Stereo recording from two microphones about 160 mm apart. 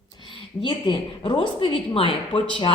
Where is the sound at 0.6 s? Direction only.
30° left (ahead or behind).